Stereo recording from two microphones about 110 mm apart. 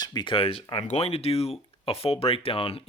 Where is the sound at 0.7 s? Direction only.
75° left (ahead or behind).